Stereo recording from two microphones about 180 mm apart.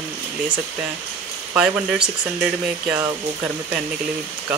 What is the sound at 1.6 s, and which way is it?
Speech, 5° right (ahead or behind).